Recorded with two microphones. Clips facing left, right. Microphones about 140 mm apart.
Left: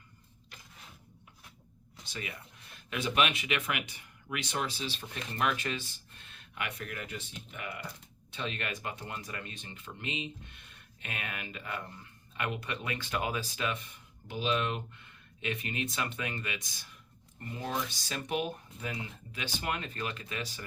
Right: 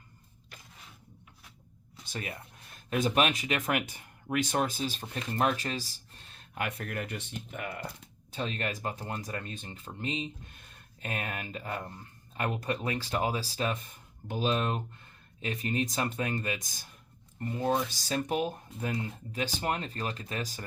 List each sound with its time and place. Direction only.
2.1 s speech: 45° right (ahead or behind)